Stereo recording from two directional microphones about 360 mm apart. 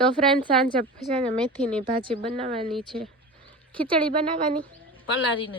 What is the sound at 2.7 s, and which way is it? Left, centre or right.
Speech, centre.